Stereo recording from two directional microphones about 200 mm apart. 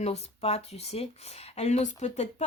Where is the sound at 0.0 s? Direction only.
30° left (ahead or behind).